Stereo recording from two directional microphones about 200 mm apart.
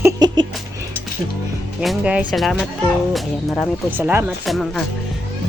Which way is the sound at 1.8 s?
5° right (ahead or behind).